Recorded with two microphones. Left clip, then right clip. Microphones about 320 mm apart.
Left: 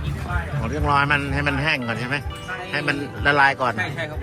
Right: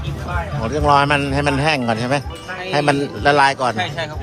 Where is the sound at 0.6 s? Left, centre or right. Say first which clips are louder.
Right 6 dB; centre.